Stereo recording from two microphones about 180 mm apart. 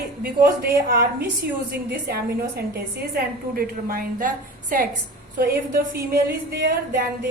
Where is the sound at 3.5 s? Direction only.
55° right (ahead or behind).